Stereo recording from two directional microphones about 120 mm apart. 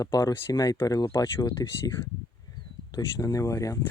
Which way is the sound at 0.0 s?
30° left (ahead or behind).